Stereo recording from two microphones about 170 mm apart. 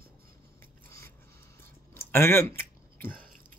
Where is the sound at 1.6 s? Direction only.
15° left (ahead or behind).